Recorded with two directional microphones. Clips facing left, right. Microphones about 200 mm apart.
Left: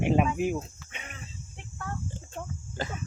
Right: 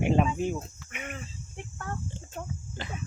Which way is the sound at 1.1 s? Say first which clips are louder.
Right 5 dB; 50° right (ahead or behind).